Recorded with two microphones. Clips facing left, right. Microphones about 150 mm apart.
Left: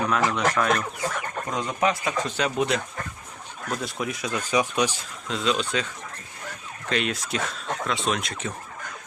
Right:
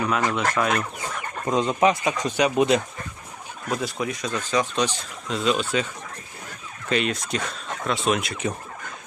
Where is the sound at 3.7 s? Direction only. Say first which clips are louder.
Right 3 dB; centre (ahead or behind).